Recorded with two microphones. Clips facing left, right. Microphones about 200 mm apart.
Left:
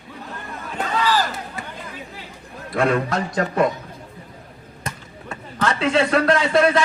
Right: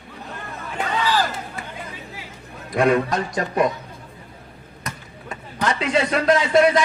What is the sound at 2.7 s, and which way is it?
Speech, 15° right (ahead or behind).